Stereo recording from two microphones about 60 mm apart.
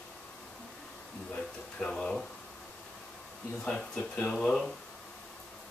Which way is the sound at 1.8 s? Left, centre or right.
Centre.